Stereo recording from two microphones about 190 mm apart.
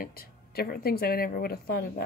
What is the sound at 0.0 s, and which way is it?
A woman's voice, 50° left (ahead or behind).